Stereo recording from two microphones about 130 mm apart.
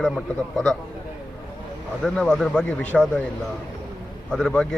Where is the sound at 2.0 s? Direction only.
5° left (ahead or behind).